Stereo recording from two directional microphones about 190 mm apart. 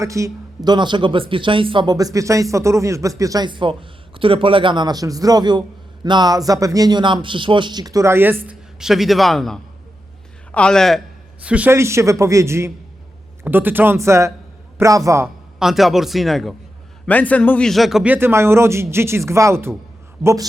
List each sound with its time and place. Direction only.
0.0 s a man's voice: 15° right (ahead or behind)
15.5 s a man's voice: centre (ahead or behind); by 20.5 s 20° right (ahead or behind)